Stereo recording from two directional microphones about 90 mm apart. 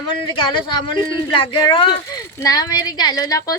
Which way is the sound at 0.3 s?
60° left (ahead or behind).